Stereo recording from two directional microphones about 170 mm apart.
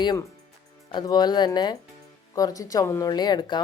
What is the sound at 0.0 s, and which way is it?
A woman's voice, 25° left (ahead or behind).